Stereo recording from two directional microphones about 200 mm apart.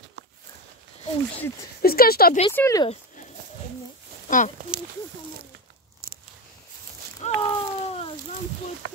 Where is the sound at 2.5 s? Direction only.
15° left (ahead or behind).